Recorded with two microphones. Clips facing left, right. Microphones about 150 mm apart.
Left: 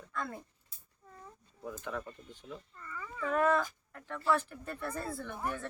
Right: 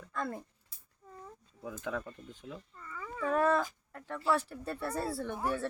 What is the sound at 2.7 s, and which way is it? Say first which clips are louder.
Dog: right 1 dB; 10° right (ahead or behind).